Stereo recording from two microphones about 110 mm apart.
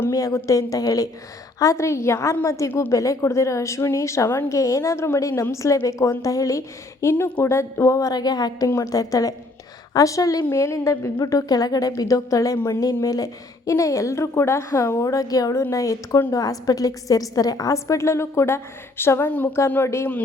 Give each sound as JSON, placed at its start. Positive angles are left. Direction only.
{"t": 0.1, "sound": "a woman's voice", "side_deg": 30}